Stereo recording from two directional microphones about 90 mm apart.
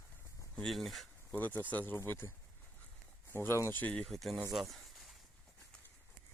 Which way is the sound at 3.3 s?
30° left (ahead or behind).